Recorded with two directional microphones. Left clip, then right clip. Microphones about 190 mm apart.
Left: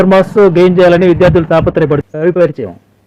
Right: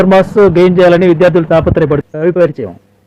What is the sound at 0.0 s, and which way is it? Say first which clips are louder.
A man's voice: even; centre (ahead or behind).